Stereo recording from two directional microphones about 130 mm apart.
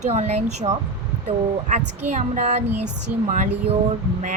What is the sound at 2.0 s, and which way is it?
Speech, 65° right (ahead or behind).